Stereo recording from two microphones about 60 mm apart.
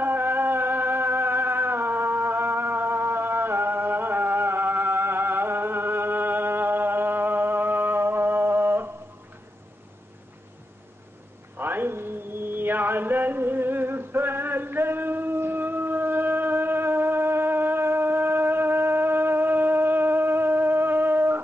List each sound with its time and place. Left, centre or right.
0.0 s music: right
11.5 s mantra: right